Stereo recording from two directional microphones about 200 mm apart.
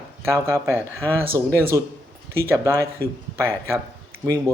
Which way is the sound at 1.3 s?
10° left (ahead or behind).